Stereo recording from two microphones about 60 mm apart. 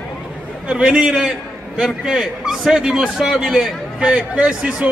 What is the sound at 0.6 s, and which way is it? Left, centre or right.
A man's voice, centre.